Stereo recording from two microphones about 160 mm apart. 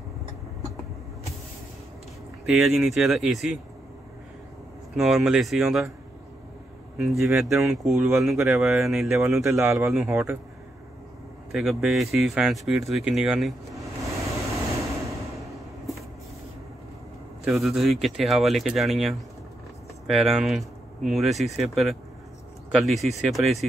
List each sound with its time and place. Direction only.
2.4 s speech: centre (ahead or behind)
4.9 s speech: centre (ahead or behind)
7.0 s speech: centre (ahead or behind)
9.4 s speech: 15° right (ahead or behind)
9.8 s speech: 5° right (ahead or behind)
10.1 s speech: 15° right (ahead or behind)
11.5 s speech: centre (ahead or behind)
14.1 s a sound: 20° right (ahead or behind)
15.4 s vehicle: centre (ahead or behind)
17.5 s speech: centre (ahead or behind)